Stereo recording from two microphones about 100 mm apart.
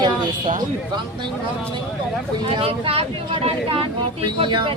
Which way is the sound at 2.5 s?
65° right (ahead or behind).